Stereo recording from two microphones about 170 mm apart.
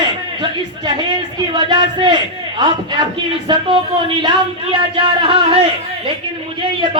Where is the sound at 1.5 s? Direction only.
25° right (ahead or behind).